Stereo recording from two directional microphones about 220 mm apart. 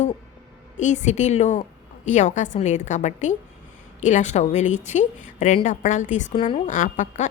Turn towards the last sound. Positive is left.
turn(degrees=35)  # may be behind; listen again after turning